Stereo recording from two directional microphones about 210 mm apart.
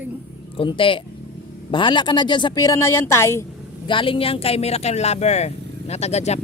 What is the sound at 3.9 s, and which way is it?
Speech, 25° left (ahead or behind).